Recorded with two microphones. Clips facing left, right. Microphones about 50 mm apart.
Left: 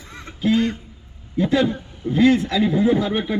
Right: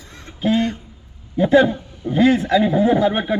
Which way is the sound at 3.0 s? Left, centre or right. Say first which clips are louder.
Right 4 dB; right.